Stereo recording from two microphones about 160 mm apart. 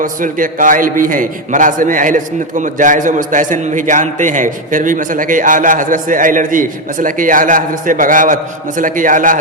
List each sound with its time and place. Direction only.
0.0 s a man's voice: 55° right (ahead or behind)